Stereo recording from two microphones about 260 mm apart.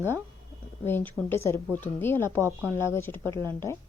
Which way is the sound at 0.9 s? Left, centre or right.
Centre.